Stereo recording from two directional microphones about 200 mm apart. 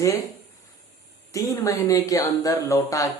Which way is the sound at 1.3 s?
15° left (ahead or behind).